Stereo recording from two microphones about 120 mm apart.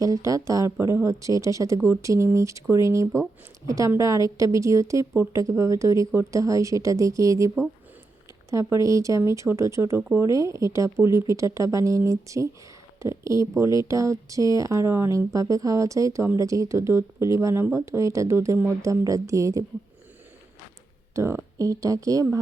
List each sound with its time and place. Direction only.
0.0 s speech: 30° right (ahead or behind)
10.0 s speech: 15° right (ahead or behind)
10.2 s speech: 25° right (ahead or behind)
21.2 s speech: 25° right (ahead or behind)